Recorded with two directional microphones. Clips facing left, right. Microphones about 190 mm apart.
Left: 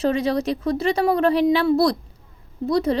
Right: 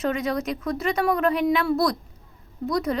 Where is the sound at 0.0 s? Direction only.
30° left (ahead or behind).